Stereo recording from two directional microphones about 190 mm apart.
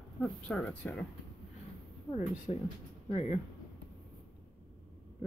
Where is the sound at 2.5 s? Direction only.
30° left (ahead or behind).